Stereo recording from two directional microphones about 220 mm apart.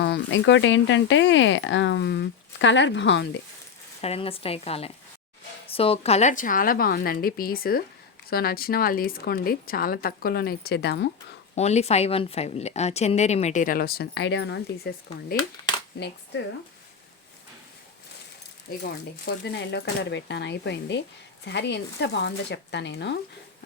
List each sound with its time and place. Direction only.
0.0 s speech: 55° left (ahead or behind)
4.0 s a woman's voice: 25° left (ahead or behind); by 11.1 s 50° left (ahead or behind)
11.5 s a woman's voice: 30° left (ahead or behind); by 15.4 s 45° left (ahead or behind)
18.8 s a woman's voice: 50° left (ahead or behind)